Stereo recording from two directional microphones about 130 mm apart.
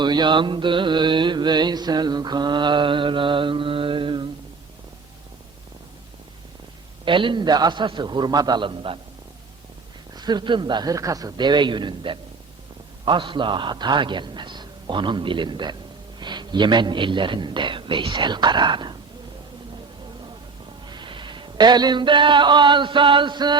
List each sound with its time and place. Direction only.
0.0 s mantra: 35° right (ahead or behind)
7.0 s mantra: 40° right (ahead or behind)
10.2 s mantra: 35° right (ahead or behind)
20.8 s a sound: 35° right (ahead or behind)